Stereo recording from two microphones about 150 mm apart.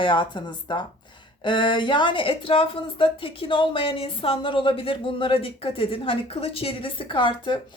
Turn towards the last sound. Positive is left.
turn(degrees=30)  # may be behind; listen again after turning